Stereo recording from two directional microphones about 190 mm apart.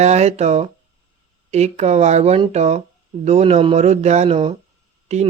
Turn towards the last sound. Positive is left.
turn(degrees=-35)  # may be behind; listen again after turning